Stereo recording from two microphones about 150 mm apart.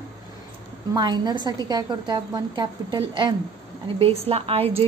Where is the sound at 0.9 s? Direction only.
25° right (ahead or behind).